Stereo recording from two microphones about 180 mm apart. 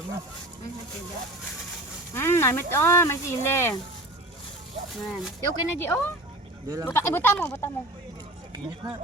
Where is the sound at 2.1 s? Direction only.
15° left (ahead or behind).